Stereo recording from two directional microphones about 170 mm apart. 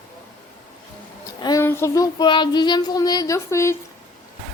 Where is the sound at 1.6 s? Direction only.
15° left (ahead or behind).